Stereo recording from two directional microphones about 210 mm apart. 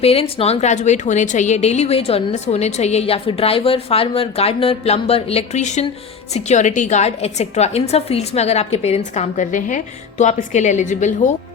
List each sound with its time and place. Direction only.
0.0 s a woman's voice: 30° left (ahead or behind)